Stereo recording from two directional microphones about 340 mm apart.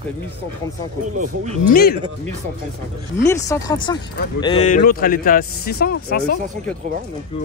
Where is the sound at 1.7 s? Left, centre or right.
Left.